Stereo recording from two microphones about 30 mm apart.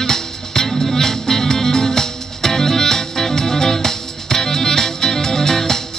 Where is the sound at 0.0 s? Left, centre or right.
Centre.